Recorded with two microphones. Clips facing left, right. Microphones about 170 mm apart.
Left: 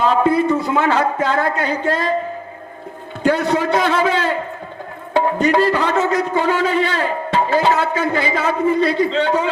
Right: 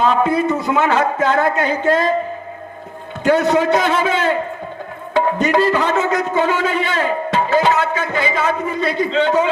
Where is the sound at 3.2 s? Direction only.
20° right (ahead or behind).